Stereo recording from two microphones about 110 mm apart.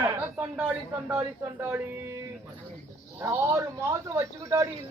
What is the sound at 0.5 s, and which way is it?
Speech, 15° right (ahead or behind).